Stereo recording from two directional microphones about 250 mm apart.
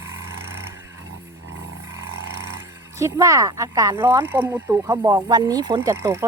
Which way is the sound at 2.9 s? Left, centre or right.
Centre.